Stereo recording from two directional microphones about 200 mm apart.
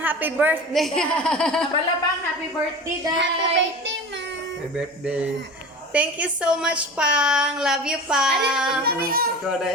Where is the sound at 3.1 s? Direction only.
60° right (ahead or behind).